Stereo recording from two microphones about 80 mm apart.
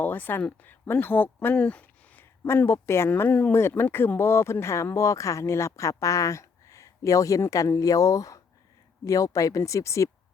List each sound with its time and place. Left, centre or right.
0.0 s speech: left
1.5 s a sound: centre
2.4 s speech: left